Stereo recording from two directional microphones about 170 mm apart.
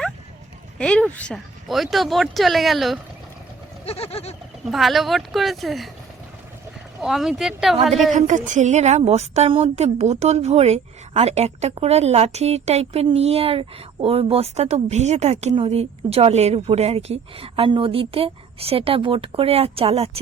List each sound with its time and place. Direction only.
0.8 s speech: 5° left (ahead or behind)
3.8 s a sound: 35° left (ahead or behind)
4.7 s speech: centre (ahead or behind)
7.0 s speech: centre (ahead or behind)
8.1 s a woman's voice: 45° right (ahead or behind)